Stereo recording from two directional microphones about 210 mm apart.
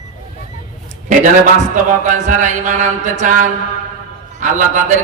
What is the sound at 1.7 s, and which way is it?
Mantra, 35° right (ahead or behind).